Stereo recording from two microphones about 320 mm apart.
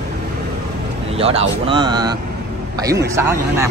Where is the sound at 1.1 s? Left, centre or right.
Centre.